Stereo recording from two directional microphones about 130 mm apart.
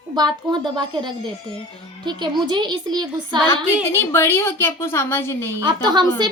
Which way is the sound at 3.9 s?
20° left (ahead or behind).